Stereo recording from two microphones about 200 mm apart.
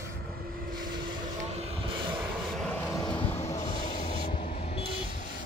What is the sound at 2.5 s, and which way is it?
Vehicle, 5° left (ahead or behind).